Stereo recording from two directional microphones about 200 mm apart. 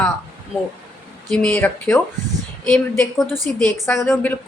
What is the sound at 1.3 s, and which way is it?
A woman's voice, 5° left (ahead or behind).